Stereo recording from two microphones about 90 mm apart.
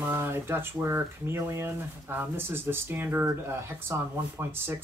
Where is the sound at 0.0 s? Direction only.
25° right (ahead or behind).